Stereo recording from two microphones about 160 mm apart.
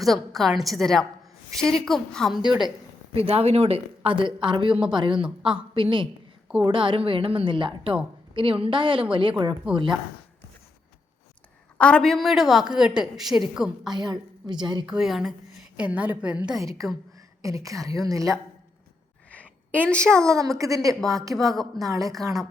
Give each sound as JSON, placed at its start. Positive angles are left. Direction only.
{"t": 0.0, "sound": "a woman's voice", "side_deg": 0}
{"t": 3.2, "sound": "a woman's voice", "side_deg": -40}
{"t": 11.8, "sound": "a woman's voice", "side_deg": 5}
{"t": 13.9, "sound": "a woman's voice", "side_deg": -25}
{"t": 14.8, "sound": "a woman's voice", "side_deg": -5}
{"t": 16.6, "sound": "a woman's voice", "side_deg": -20}
{"t": 19.3, "sound": "a sound", "side_deg": 10}
{"t": 20.2, "sound": "a woman's voice", "side_deg": -20}
{"t": 21.5, "sound": "a woman's voice", "side_deg": 0}
{"t": 21.8, "sound": "a woman's voice", "side_deg": -20}